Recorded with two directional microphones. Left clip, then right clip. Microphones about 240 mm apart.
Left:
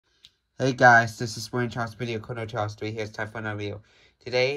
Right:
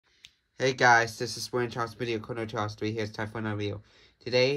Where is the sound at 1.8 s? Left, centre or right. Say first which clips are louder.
Left 1 dB; centre.